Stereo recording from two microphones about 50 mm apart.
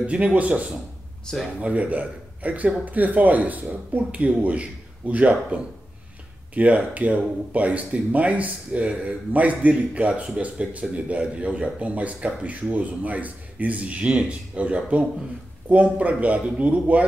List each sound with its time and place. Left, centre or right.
0.0 s speech: right
1.3 s speech: centre
1.6 s a man's voice: right